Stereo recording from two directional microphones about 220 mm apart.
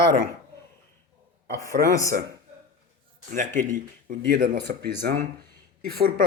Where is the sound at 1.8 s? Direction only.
15° left (ahead or behind).